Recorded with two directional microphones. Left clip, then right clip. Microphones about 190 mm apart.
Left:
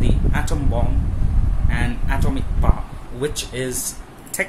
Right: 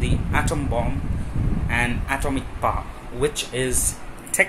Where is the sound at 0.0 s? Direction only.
10° left (ahead or behind).